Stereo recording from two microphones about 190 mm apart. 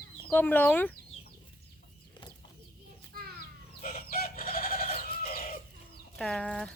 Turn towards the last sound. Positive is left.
turn(degrees=5)  # may be behind; listen again after turning